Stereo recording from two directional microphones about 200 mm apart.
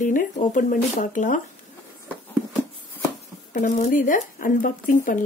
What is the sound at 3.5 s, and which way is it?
Speech, 40° left (ahead or behind).